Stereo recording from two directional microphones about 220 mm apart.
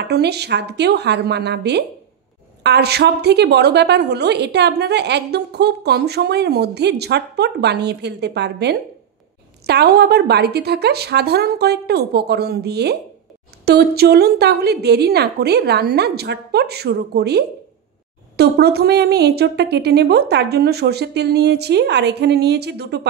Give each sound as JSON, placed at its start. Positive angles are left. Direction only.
{"t": 0.1, "sound": "a woman's voice", "side_deg": -50}